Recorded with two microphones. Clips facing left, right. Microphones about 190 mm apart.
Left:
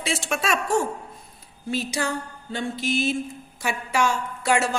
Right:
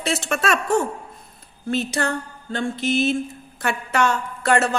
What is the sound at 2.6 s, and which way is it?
Speech, 55° right (ahead or behind).